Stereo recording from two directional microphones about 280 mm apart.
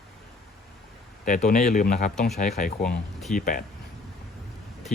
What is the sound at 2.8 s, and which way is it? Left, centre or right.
Speech, centre.